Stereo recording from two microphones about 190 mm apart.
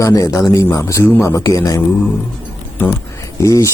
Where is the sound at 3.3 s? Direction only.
15° left (ahead or behind).